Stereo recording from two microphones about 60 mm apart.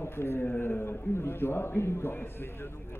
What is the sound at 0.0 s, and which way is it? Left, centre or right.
A man's voice, left.